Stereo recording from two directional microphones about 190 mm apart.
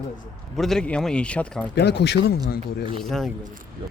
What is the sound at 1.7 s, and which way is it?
Speech, 60° left (ahead or behind).